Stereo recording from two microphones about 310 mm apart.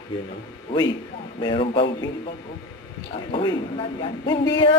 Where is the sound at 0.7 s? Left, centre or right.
Centre.